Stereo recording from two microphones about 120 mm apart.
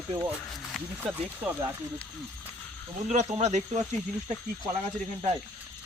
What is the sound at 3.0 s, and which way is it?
Speech, 75° right (ahead or behind).